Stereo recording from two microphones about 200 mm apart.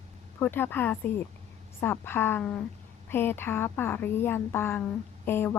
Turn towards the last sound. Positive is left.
turn(degrees=10)  # may be behind; listen again after turning